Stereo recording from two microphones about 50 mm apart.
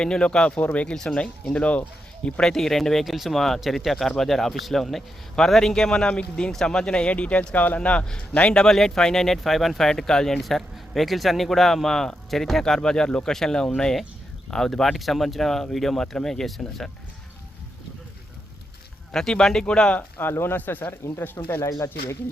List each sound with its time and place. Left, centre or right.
0.0 s speech: centre
0.6 s speech: left
0.9 s speech: centre
1.5 s speech: left
2.4 s speech: centre; by 7.8 s left
7.8 s speech: left
8.5 s speech: centre
19.1 s speech: centre
20.0 s speech: left
20.6 s speech: left